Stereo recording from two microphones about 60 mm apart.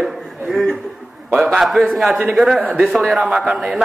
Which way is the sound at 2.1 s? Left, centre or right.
Centre.